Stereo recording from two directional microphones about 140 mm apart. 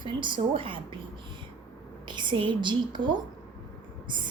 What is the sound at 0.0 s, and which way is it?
Speech, 35° right (ahead or behind).